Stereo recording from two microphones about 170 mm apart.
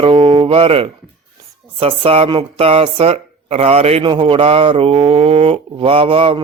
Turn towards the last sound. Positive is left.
turn(degrees=-30)  # may be behind; listen again after turning